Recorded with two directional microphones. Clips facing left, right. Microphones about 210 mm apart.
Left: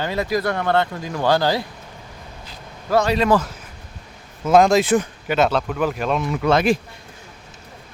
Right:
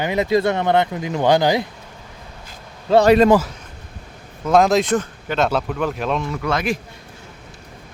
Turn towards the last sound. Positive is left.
turn(degrees=30)  # may be behind; listen again after turning